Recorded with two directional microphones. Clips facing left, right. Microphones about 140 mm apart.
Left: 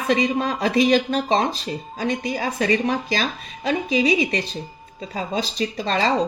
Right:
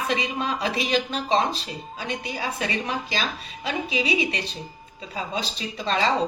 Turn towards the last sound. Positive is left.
turn(degrees=45)  # may be behind; listen again after turning